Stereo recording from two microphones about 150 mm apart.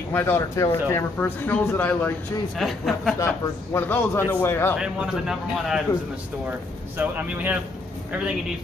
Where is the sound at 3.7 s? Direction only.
15° left (ahead or behind).